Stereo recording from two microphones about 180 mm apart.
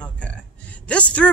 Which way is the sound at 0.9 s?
5° left (ahead or behind).